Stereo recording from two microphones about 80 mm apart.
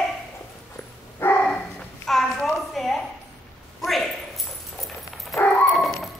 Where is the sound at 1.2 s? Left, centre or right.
Left.